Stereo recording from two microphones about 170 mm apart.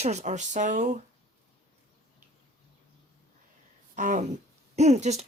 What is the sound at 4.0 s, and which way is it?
Speech, 45° right (ahead or behind).